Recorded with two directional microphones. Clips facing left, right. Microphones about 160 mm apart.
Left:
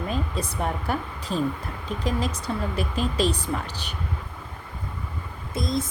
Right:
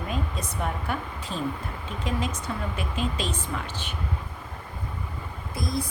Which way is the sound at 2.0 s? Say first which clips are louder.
Left 2 dB; 35° left (ahead or behind).